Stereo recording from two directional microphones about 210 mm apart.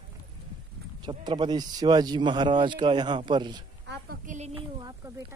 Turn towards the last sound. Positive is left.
turn(degrees=-30)  # may be behind; listen again after turning